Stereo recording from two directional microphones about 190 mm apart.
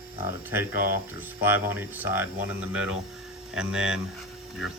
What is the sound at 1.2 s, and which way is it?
Speech, 10° right (ahead or behind).